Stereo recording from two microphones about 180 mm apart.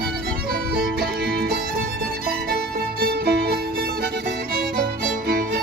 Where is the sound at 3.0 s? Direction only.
60° right (ahead or behind).